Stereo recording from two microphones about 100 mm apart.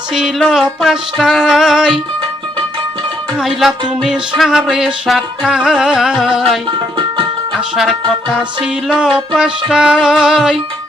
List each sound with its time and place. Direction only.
0.1 s music: 5° right (ahead or behind)
3.3 s music: centre (ahead or behind)
6.7 s tabla: 55° right (ahead or behind)
7.5 s music: centre (ahead or behind)